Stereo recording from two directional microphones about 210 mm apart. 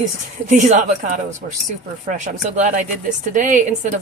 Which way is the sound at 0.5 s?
35° right (ahead or behind).